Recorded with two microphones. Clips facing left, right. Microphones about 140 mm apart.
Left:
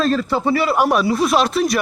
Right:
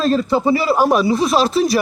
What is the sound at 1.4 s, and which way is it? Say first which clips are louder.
Speech: right 2 dB; 30° right (ahead or behind).